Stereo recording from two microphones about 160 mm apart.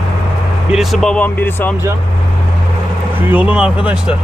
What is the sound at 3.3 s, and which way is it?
Speech, 10° right (ahead or behind).